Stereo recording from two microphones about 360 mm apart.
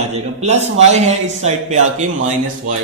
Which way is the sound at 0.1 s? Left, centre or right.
Centre.